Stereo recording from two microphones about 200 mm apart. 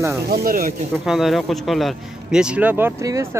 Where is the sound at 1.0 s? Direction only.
Centre (ahead or behind).